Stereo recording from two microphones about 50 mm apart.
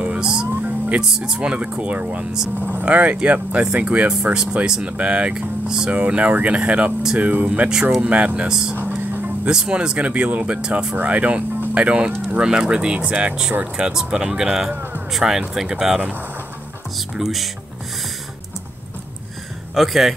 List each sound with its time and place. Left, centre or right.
0.0 s music: centre
0.6 s music: right
1.2 s speech: centre
1.6 s speech: right
4.8 s speech: right
8.5 s speech: centre
9.1 s music: right
9.5 s speech: centre
11.0 s speech: right; by 16.0 s centre
17.2 s speech: centre
19.7 s speech: centre